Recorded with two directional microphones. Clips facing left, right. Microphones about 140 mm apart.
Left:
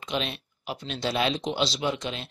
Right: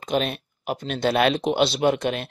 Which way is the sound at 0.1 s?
50° right (ahead or behind).